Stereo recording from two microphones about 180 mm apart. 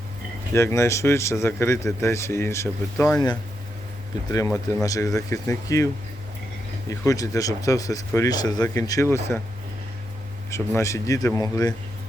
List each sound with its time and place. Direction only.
0.5 s speech: 15° left (ahead or behind)
4.3 s speech: 20° left (ahead or behind)
7.0 s speech: 20° left (ahead or behind)
10.8 s speech: 15° left (ahead or behind)